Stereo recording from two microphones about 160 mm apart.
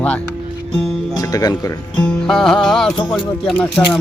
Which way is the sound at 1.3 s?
20° left (ahead or behind).